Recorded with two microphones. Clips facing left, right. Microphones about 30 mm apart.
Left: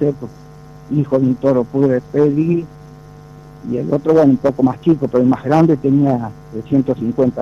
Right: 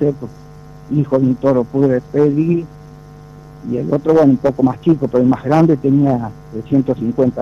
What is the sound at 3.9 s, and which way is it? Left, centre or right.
Speech, centre.